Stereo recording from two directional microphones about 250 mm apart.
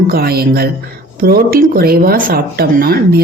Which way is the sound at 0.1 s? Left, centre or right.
Right.